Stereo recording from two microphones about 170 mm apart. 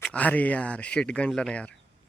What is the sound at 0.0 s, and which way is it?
Speech, 10° left (ahead or behind).